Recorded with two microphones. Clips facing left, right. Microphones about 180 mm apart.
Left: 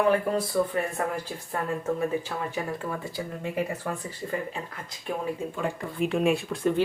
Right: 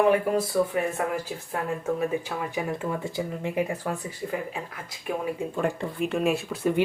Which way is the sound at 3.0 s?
15° right (ahead or behind).